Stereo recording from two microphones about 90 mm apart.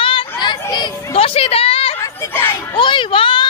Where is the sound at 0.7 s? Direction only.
55° left (ahead or behind).